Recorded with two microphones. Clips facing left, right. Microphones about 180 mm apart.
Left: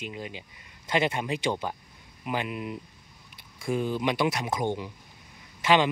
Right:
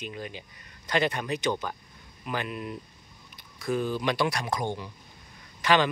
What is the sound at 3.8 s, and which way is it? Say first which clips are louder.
Speech: left 2 dB; 20° left (ahead or behind).